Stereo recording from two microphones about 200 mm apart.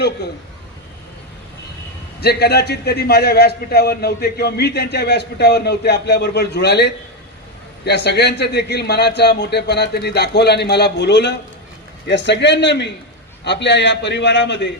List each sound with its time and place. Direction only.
2.2 s a man's voice: 55° left (ahead or behind)